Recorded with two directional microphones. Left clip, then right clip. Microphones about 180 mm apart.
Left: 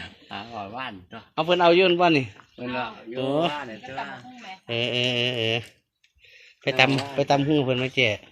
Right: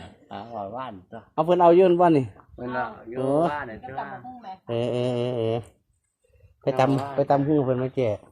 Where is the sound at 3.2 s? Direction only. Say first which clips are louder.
Right 2 dB; 5° right (ahead or behind).